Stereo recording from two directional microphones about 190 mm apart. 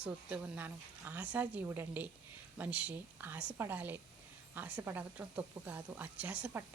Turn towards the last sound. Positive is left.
turn(degrees=-5)  # may be behind; listen again after turning